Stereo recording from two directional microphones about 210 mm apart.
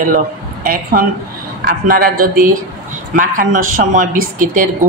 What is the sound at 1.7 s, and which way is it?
A man's voice, 45° right (ahead or behind).